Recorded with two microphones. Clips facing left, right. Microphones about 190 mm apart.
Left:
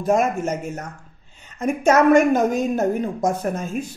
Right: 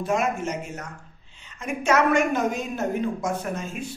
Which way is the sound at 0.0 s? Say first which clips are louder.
Left 5 dB; 45° left (ahead or behind).